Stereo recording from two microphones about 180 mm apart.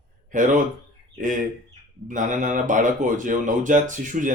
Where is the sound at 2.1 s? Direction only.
45° right (ahead or behind).